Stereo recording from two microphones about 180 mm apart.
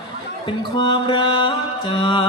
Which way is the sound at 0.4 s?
25° left (ahead or behind).